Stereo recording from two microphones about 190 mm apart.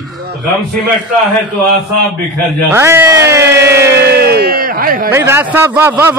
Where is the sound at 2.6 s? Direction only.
15° right (ahead or behind).